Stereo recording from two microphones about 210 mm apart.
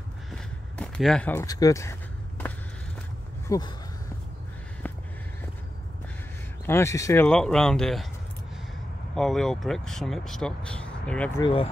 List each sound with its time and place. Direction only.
0.3 s a sound: 5° left (ahead or behind)
3.4 s speech: 15° left (ahead or behind)
6.6 s speech: 10° left (ahead or behind)
7.2 s speech: 5° left (ahead or behind)
9.1 s speech: centre (ahead or behind)
11.4 s speech: 25° left (ahead or behind)